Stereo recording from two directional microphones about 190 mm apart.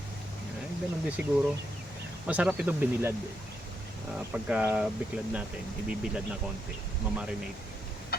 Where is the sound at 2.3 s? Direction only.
5° right (ahead or behind).